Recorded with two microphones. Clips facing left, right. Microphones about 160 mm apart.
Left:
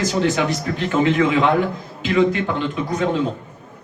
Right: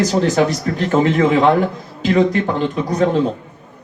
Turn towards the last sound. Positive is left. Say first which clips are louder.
# right 4 dB
turn(degrees=-40)  # may be behind; listen again after turning